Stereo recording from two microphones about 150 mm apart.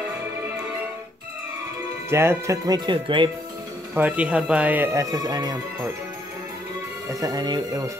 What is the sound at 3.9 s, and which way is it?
Speech, 10° right (ahead or behind).